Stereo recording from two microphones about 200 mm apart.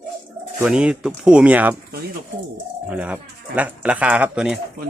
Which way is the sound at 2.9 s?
5° right (ahead or behind).